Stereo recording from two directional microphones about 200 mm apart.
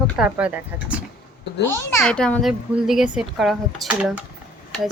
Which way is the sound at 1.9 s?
5° left (ahead or behind).